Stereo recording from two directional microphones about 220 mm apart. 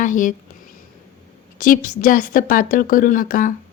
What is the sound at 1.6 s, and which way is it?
A woman's voice, 40° left (ahead or behind).